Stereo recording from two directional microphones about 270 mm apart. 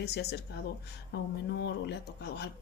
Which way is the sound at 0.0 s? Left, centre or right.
Left.